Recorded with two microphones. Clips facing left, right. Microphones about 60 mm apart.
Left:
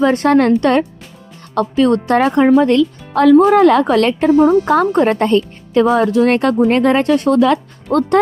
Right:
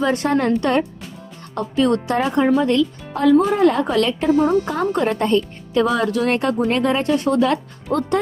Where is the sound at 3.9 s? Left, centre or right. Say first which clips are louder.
Left 5 dB; left.